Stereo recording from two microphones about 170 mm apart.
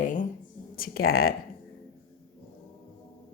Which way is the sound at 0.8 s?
60° left (ahead or behind).